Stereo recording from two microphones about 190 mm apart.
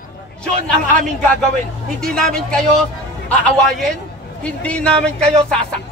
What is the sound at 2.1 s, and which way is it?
A man's voice, 5° left (ahead or behind).